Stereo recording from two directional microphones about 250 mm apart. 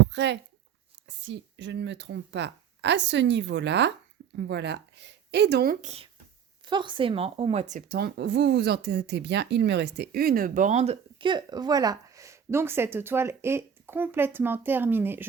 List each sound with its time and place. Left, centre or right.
0.1 s speech: right
5.8 s speech: right; by 15.3 s centre